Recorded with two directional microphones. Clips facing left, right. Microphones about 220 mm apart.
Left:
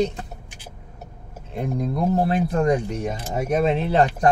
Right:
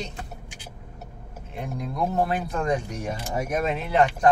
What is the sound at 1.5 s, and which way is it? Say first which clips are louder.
Speech: left 6 dB; 40° left (ahead or behind).